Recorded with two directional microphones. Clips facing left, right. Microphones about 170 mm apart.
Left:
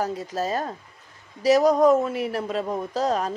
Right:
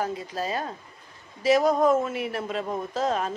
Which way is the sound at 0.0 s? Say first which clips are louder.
Left 3 dB; 40° left (ahead or behind).